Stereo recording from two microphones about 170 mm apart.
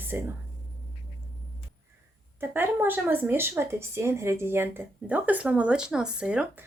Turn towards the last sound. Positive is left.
turn(degrees=-5)  # may be behind; listen again after turning